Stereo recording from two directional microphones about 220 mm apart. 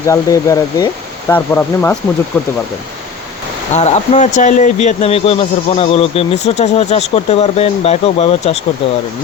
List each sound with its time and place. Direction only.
0.1 s speech: 15° left (ahead or behind)
3.8 s speech: 30° left (ahead or behind)